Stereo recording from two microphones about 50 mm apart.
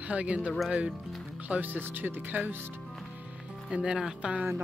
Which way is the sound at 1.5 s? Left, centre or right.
Right.